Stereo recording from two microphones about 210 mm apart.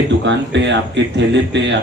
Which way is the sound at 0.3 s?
60° right (ahead or behind).